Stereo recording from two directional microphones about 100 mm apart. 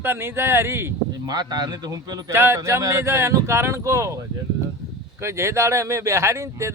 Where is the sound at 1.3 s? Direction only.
40° right (ahead or behind).